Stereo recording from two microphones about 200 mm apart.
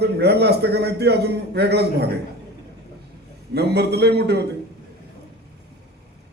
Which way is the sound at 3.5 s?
55° right (ahead or behind).